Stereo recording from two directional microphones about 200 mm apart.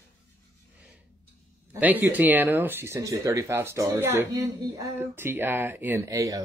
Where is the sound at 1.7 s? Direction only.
10° right (ahead or behind).